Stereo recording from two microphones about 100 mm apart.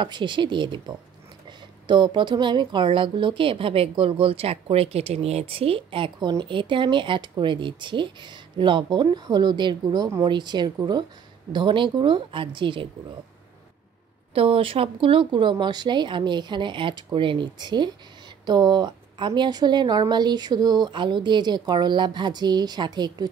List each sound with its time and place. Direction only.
0.0 s a woman's voice: 55° right (ahead or behind)
14.3 s speech: 65° right (ahead or behind)
15.5 s a woman's voice: 45° right (ahead or behind)